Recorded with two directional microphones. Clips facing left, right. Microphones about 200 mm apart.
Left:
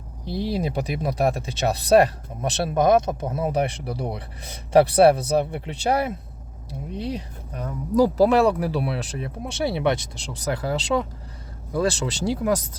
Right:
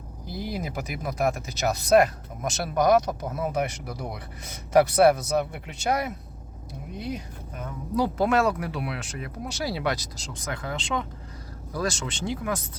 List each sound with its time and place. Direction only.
0.3 s speech: 30° left (ahead or behind)